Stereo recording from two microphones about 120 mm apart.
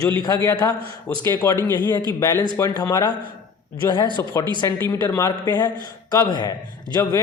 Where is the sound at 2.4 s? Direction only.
35° left (ahead or behind).